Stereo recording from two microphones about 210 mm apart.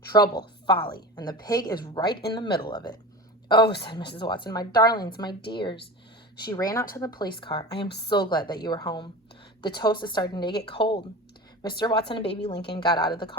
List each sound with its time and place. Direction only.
0.1 s speech: 20° left (ahead or behind)